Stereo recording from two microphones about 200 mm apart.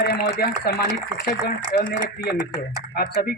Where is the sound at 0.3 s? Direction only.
50° left (ahead or behind).